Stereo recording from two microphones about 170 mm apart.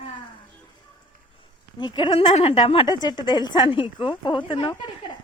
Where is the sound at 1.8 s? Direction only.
25° left (ahead or behind).